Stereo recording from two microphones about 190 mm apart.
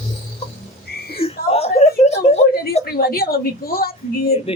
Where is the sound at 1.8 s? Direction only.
35° left (ahead or behind).